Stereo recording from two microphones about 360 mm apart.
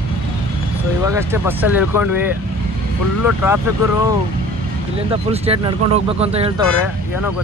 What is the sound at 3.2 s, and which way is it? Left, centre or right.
Speech, centre.